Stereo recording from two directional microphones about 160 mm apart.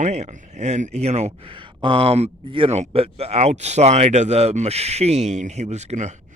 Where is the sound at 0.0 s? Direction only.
45° right (ahead or behind).